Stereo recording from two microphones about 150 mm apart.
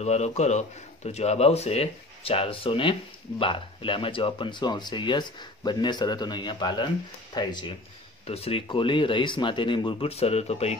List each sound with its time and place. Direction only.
0.0 s speech: 45° left (ahead or behind); by 7.7 s 30° left (ahead or behind)
8.3 s speech: 40° left (ahead or behind)